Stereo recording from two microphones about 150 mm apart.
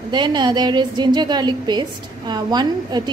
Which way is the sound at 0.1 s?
30° right (ahead or behind).